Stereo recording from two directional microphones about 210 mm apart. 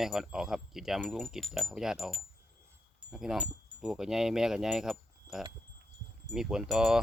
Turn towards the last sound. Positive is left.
turn(degrees=-5)  # may be behind; listen again after turning